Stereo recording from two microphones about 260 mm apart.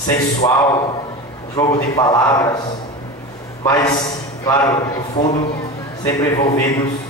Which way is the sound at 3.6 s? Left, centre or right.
Centre.